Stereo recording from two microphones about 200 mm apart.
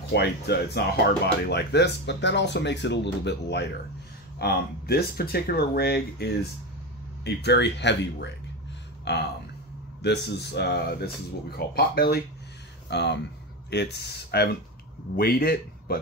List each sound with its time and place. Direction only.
0.1 s a man's voice: 55° left (ahead or behind)